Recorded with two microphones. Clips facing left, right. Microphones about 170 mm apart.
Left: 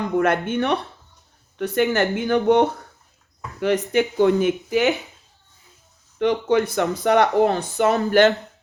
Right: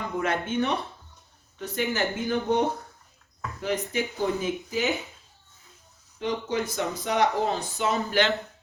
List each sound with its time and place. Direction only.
0.0 s speech: 60° left (ahead or behind)
6.1 s speech: 65° left (ahead or behind)